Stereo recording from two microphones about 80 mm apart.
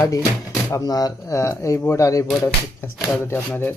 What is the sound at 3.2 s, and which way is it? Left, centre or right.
Speech, left.